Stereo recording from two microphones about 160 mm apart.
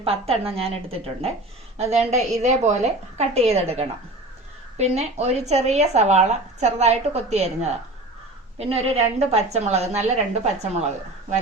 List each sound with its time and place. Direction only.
0.0 s a woman's voice: 40° right (ahead or behind)